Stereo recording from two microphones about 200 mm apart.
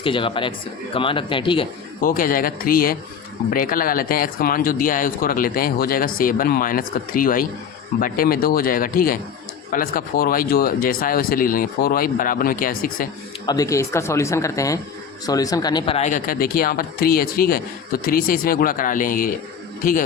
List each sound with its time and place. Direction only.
0.0 s speech: 25° left (ahead or behind)
2.0 s speech: 45° left (ahead or behind)
13.4 s speech: 20° left (ahead or behind)
16.0 s speech: 40° left (ahead or behind)